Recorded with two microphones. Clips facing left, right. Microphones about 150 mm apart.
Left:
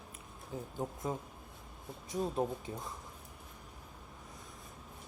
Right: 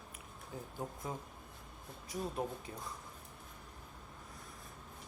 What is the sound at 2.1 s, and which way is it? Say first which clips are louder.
Speech: left 5 dB; 25° left (ahead or behind).